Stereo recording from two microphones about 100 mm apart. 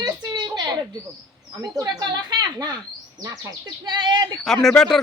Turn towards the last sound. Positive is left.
turn(degrees=5)  # may be behind; listen again after turning